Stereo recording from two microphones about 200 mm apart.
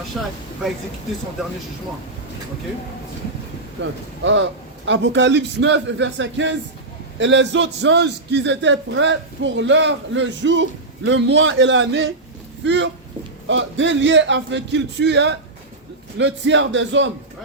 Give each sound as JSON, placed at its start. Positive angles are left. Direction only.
{"t": 0.1, "sound": "speech", "side_deg": 0}
{"t": 3.8, "sound": "a man's voice", "side_deg": -65}